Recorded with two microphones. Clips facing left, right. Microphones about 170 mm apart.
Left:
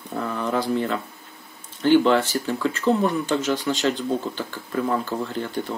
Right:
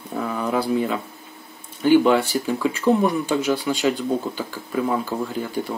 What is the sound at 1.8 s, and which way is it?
Speech, 10° right (ahead or behind).